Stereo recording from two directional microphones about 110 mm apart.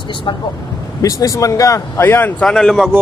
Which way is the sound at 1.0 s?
30° left (ahead or behind).